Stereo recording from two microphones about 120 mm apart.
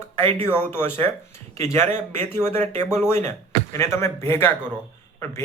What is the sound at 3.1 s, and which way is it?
Speech, 70° right (ahead or behind).